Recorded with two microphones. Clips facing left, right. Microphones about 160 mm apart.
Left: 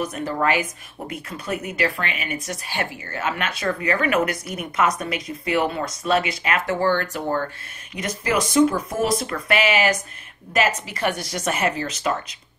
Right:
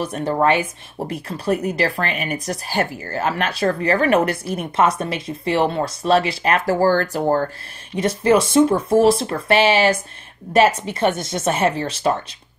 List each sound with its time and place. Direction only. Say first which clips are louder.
0.0 s speech: right 4 dB; 30° right (ahead or behind)